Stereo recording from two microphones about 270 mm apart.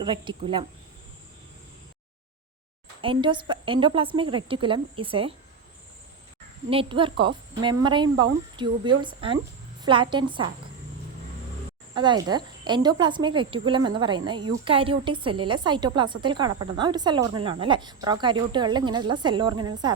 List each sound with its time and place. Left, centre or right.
0.0 s speech: centre
3.0 s speech: centre
6.7 s speech: centre
11.9 s speech: centre